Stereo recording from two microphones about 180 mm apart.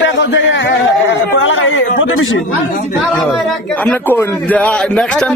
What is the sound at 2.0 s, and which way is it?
Speech, 90° left.